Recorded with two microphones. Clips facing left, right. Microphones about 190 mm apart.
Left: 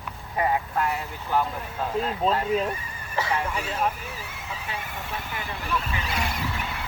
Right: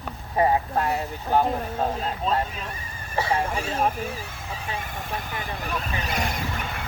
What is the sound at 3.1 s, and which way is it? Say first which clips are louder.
Speech: right 2 dB; 30° right (ahead or behind).